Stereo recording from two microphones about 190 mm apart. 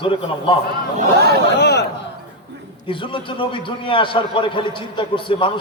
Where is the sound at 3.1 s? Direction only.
25° left (ahead or behind).